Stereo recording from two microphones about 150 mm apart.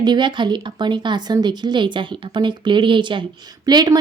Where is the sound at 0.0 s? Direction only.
30° right (ahead or behind).